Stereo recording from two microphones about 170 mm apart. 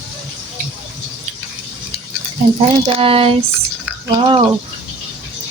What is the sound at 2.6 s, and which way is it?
Speech, 35° right (ahead or behind).